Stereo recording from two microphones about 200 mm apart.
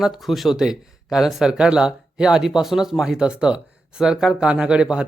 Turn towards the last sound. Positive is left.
turn(degrees=-5)  # may be behind; listen again after turning